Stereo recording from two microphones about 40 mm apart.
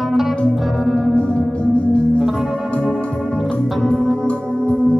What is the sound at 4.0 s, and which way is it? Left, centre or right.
Music, left.